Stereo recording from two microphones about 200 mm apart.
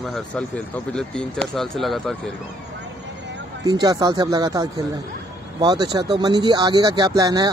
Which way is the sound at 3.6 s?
20° right (ahead or behind).